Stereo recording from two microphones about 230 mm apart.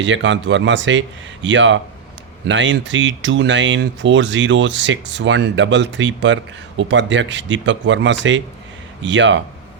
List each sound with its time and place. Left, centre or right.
0.0 s speech: right